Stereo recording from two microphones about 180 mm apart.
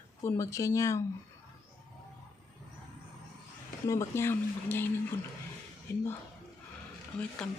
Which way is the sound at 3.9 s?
15° left (ahead or behind).